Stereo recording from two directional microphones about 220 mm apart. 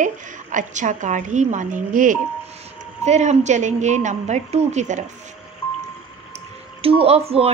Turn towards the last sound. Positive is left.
turn(degrees=-25)  # may be behind; listen again after turning